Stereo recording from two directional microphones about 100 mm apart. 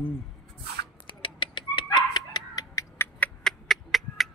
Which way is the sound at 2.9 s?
25° left (ahead or behind).